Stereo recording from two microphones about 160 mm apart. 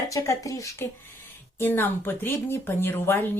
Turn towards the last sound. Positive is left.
turn(degrees=15)  # may be behind; listen again after turning